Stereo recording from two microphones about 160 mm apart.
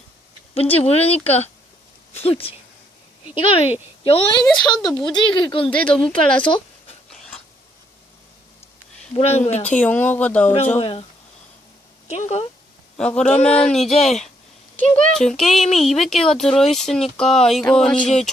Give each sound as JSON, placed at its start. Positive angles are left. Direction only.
{"t": 0.5, "sound": "a woman's voice", "side_deg": 40}
{"t": 5.7, "sound": "speech", "side_deg": 5}
{"t": 7.1, "sound": "a sound", "side_deg": 5}
{"t": 9.1, "sound": "speech", "side_deg": 45}
{"t": 9.6, "sound": "speech", "side_deg": 10}
{"t": 10.8, "sound": "a woman's voice", "side_deg": 40}
{"t": 12.0, "sound": "speech", "side_deg": 45}
{"t": 13.0, "sound": "speech", "side_deg": 5}